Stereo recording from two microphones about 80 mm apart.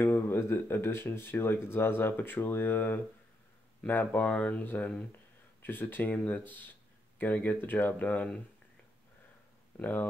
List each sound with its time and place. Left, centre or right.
0.0 s speech: left
9.8 s speech: left